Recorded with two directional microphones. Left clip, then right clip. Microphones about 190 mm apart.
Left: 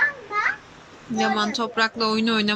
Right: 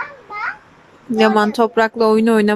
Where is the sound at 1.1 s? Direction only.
45° right (ahead or behind).